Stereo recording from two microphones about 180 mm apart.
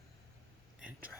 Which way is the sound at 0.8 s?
10° right (ahead or behind).